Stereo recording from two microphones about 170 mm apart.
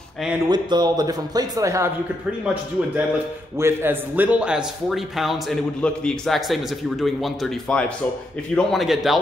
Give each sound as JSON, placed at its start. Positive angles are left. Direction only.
{"t": 0.5, "sound": "speech", "side_deg": -25}
{"t": 3.5, "sound": "a man's voice", "side_deg": -15}